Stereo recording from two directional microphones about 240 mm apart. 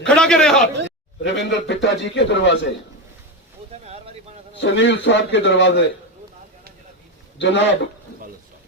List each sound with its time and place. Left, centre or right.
0.0 s speech: centre
1.2 s a man's voice: left
3.8 s a sound: right
4.6 s a man's voice: left
7.3 s a man's voice: left